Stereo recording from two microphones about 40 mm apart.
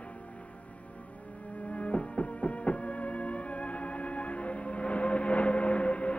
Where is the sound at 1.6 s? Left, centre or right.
Left.